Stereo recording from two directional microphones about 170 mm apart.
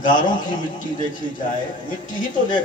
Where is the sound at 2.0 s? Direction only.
50° left (ahead or behind).